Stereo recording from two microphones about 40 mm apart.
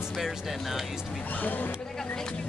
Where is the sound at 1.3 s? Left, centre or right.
Left.